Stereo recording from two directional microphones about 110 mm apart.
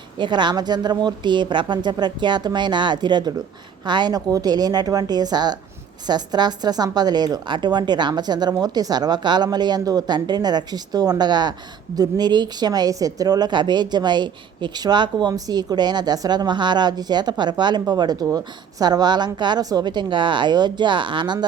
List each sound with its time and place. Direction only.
0.2 s a woman's voice: 45° right (ahead or behind)